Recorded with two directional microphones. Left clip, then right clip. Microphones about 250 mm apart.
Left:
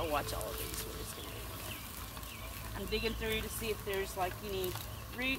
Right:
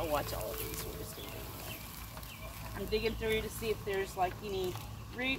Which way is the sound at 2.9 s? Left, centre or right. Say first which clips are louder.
Right 3 dB; centre.